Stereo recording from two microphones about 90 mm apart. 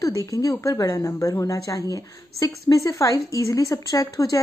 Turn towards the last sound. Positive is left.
turn(degrees=40)  # may be behind; listen again after turning